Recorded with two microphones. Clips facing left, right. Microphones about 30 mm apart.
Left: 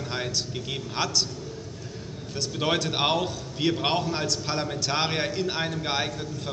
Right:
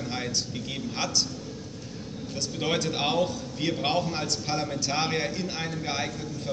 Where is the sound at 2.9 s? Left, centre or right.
Left.